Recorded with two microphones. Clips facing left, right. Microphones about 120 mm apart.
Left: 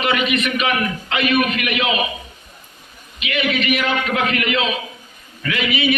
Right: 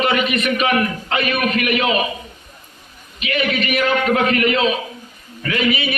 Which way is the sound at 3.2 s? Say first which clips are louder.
Right 1 dB; 35° right (ahead or behind).